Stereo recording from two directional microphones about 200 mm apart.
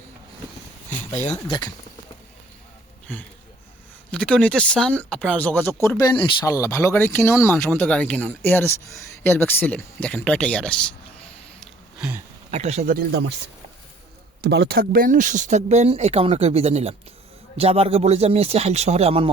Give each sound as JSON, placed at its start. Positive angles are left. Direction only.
{"t": 0.9, "sound": "a sound", "side_deg": 35}
{"t": 1.5, "sound": "speech", "side_deg": 20}
{"t": 3.1, "sound": "speech", "side_deg": 10}
{"t": 12.5, "sound": "speech", "side_deg": -35}
{"t": 14.4, "sound": "speech", "side_deg": -55}